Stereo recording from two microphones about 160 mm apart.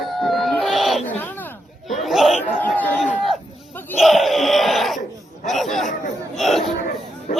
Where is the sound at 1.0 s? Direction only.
10° left (ahead or behind).